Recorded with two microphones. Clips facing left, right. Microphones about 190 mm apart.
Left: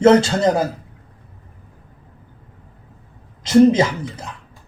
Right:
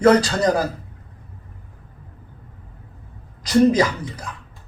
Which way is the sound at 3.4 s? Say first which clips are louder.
Left 3 dB; 25° left (ahead or behind).